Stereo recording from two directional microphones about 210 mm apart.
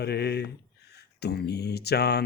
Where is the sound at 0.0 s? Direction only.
50° left (ahead or behind).